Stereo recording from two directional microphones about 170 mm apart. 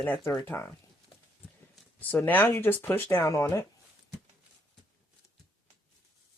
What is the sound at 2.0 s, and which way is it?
Speech, 10° left (ahead or behind).